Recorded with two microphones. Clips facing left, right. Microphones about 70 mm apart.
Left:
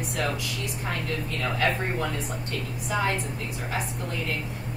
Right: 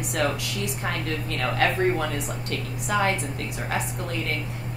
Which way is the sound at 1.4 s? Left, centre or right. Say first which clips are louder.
Right 4 dB; right.